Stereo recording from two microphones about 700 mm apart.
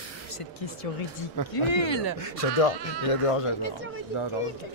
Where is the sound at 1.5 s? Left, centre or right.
Left.